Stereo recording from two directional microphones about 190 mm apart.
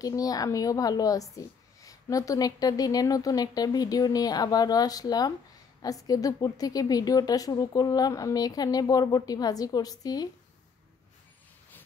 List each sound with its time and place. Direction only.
0.0 s a woman's voice: 20° left (ahead or behind)